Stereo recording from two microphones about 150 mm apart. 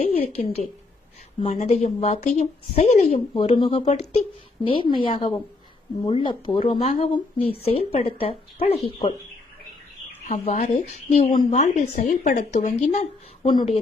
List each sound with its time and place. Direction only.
0.0 s a woman's voice: 45° left (ahead or behind)
3.3 s speech: 35° left (ahead or behind)
6.8 s a woman's voice: 45° left (ahead or behind)
10.2 s a woman's voice: 50° left (ahead or behind)
13.4 s speech: 30° left (ahead or behind)